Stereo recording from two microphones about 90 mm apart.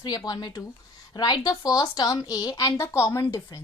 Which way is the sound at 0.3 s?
50° left (ahead or behind).